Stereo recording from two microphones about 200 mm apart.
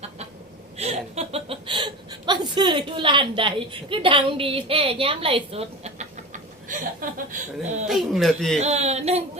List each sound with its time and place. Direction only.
0.8 s speech: 30° right (ahead or behind)
7.9 s speech: centre (ahead or behind)
8.5 s speech: 35° right (ahead or behind)